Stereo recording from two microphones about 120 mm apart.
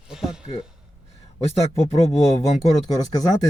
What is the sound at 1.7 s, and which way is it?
Speech, 55° left (ahead or behind).